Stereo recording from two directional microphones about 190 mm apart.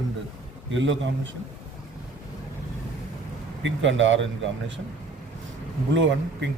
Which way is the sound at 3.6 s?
75° right (ahead or behind).